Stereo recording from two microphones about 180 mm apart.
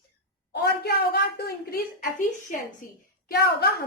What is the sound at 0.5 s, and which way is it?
A woman's voice, 65° left (ahead or behind).